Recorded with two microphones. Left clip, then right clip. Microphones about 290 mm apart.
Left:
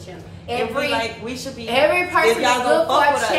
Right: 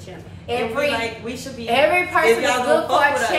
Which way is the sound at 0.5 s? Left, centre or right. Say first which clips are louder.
Even; centre.